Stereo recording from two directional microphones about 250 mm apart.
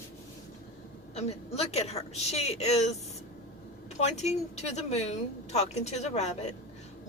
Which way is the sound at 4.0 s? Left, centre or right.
Left.